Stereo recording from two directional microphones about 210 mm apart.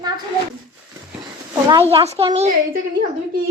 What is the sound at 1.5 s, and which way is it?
Speech, 25° right (ahead or behind).